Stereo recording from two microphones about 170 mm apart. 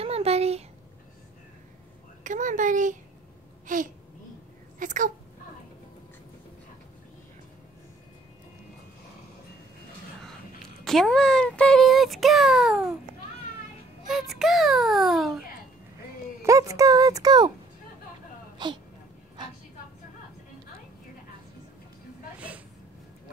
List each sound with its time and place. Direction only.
0.0 s a sound: 35° right (ahead or behind)
2.2 s a child's voice: 50° right (ahead or behind)
3.6 s babbling: 50° right (ahead or behind)
4.7 s speech: 50° right (ahead or behind)
10.8 s a child's voice: centre (ahead or behind)
14.0 s a child's voice: centre (ahead or behind)
16.4 s speech: 20° right (ahead or behind)
18.6 s speech: 25° right (ahead or behind)